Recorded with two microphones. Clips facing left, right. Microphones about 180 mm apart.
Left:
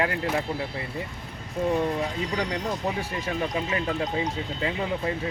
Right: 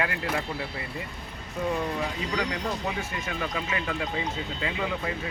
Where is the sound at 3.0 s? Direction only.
35° left (ahead or behind).